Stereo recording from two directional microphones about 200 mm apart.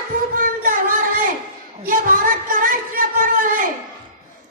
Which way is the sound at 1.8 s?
45° right (ahead or behind).